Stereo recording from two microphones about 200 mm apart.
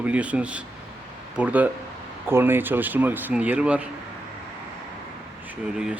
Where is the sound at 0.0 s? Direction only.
5° right (ahead or behind).